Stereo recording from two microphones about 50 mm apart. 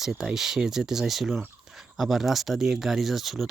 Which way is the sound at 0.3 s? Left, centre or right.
Centre.